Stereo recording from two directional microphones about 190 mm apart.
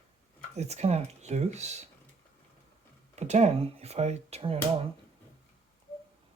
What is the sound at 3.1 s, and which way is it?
Speech, 35° right (ahead or behind).